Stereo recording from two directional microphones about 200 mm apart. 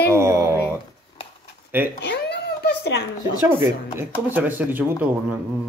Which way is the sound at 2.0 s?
55° left (ahead or behind).